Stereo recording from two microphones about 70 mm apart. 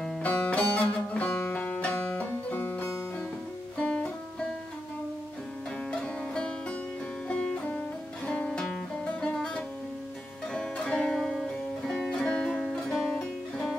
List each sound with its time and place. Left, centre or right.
0.2 s music: left
5.9 s music: centre
12.5 s music: centre